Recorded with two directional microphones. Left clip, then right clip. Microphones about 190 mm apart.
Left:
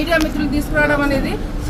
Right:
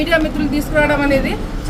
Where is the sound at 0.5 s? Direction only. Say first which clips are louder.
Right 1 dB; centre (ahead or behind).